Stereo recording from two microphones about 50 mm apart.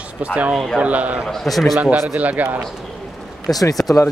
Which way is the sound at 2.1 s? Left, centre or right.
Right.